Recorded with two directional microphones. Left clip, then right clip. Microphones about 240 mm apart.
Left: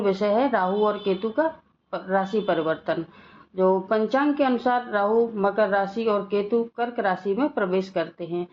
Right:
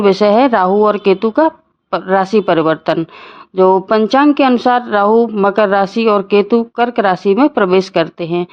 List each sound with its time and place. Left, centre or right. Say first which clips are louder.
0.0 s a woman's voice: right 12 dB; right